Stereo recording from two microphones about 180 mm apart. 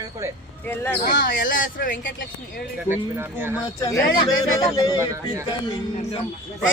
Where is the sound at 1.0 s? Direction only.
55° left (ahead or behind).